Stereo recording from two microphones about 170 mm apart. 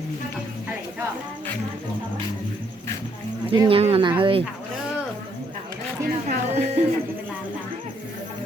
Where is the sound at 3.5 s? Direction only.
30° right (ahead or behind).